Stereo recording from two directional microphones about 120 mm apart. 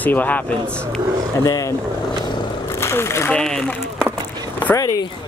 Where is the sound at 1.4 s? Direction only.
30° left (ahead or behind).